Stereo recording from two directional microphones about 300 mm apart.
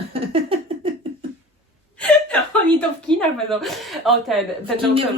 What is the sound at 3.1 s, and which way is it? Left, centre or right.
A woman's voice, centre.